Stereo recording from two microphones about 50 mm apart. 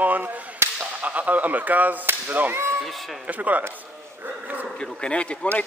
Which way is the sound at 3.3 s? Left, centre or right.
Right.